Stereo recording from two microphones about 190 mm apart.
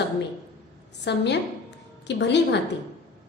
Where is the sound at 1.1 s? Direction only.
65° left (ahead or behind).